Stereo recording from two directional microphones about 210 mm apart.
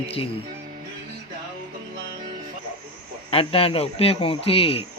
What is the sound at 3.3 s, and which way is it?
Speech, 25° left (ahead or behind).